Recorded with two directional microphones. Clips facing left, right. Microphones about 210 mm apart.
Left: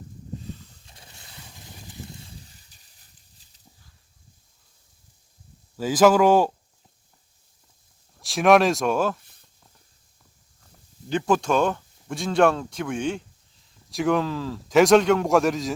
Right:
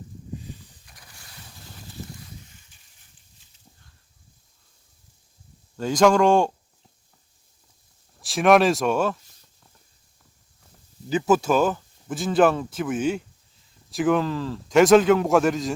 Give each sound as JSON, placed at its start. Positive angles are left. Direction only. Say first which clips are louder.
{"t": 0.9, "sound": "vehicle", "louder": "left 1 dB", "side_deg": 25}
{"t": 2.2, "sound": "a sound", "louder": "right 1 dB", "side_deg": 35}
{"t": 5.7, "sound": "speech", "louder": "left 1 dB", "side_deg": 5}
{"t": 8.2, "sound": "speech", "louder": "even", "side_deg": 0}
{"t": 11.1, "sound": "speech", "louder": "right 2 dB", "side_deg": -5}